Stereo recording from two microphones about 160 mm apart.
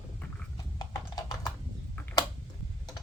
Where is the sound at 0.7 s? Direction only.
25° left (ahead or behind).